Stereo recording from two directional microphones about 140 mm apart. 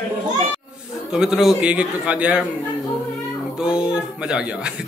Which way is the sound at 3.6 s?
5° right (ahead or behind).